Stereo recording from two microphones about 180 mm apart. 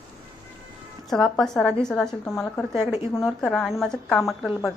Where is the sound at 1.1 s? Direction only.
Centre (ahead or behind).